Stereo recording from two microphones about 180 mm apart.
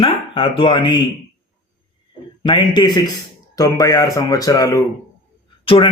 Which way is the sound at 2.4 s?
25° left (ahead or behind).